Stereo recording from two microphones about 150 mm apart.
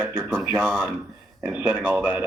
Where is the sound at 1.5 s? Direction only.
10° right (ahead or behind).